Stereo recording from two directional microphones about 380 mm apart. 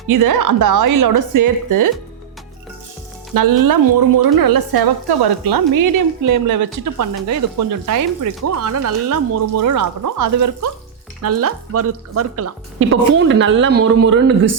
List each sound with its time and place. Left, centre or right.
0.1 s a woman's voice: right
3.3 s a woman's voice: right